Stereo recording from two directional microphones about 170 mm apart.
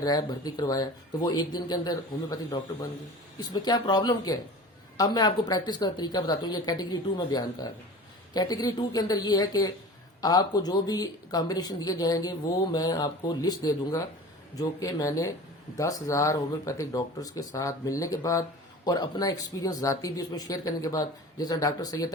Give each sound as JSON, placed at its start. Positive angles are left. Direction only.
{"t": 0.0, "sound": "speech", "side_deg": 25}